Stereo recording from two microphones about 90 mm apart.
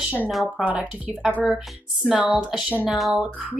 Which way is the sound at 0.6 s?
15° right (ahead or behind).